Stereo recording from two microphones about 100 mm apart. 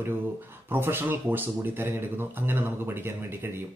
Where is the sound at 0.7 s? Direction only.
20° right (ahead or behind).